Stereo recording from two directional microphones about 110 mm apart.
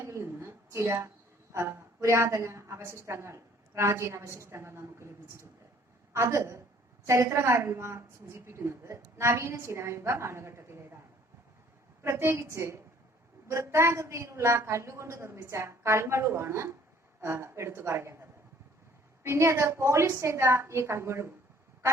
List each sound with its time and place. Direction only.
0.0 s a sound: 25° right (ahead or behind)
1.5 s a woman's voice: 25° right (ahead or behind)
12.0 s a woman's voice: 25° right (ahead or behind)